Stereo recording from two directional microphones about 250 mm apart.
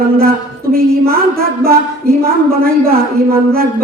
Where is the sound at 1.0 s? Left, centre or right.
Right.